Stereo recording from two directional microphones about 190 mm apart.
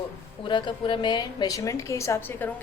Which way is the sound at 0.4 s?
25° left (ahead or behind).